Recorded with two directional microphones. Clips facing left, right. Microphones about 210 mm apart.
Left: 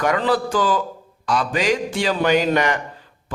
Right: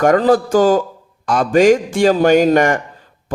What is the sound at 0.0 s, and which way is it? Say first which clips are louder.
A man's voice: right 7 dB; 45° right (ahead or behind).